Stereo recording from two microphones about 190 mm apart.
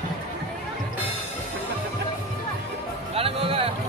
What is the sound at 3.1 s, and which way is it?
Music, 30° right (ahead or behind).